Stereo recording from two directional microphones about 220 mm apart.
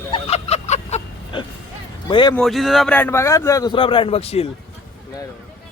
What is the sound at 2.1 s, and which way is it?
Speech, 20° left (ahead or behind).